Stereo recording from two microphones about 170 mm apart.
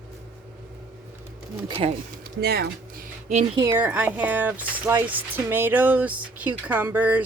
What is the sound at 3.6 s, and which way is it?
Speech, 15° right (ahead or behind).